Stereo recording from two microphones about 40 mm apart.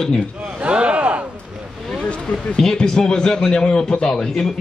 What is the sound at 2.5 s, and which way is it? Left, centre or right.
A man's voice, centre.